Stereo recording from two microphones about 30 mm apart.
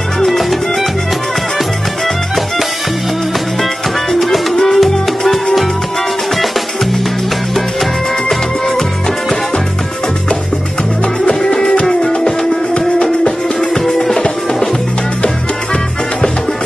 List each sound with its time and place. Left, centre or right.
0.4 s music: centre
4.1 s music: centre
11.3 s music: centre
13.0 s music: centre
15.2 s music: left